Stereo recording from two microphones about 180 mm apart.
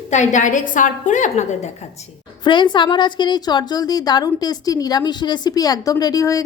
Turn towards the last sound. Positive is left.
turn(degrees=20)  # may be behind; listen again after turning